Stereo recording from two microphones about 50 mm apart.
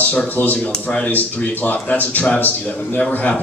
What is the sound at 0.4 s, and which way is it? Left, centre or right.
A man's voice, left.